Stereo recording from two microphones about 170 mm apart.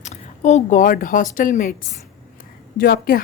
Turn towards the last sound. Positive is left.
turn(degrees=60)  # may be behind; listen again after turning